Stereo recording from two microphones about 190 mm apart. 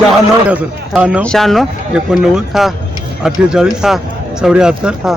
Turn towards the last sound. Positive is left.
turn(degrees=-5)  # may be behind; listen again after turning